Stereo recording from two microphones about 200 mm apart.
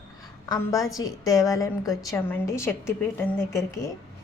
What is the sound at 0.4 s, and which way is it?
Speech, 15° left (ahead or behind).